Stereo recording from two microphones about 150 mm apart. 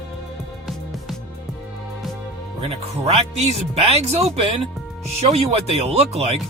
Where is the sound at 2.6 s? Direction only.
40° right (ahead or behind).